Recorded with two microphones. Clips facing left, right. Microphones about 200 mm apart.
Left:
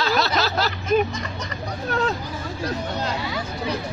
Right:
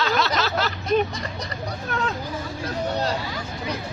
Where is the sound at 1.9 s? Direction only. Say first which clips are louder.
Left 4 dB; 35° left (ahead or behind).